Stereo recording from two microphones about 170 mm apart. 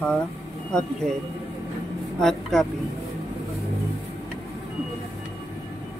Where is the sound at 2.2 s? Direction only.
Centre (ahead or behind).